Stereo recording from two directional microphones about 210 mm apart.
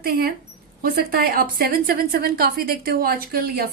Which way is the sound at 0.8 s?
45° right (ahead or behind).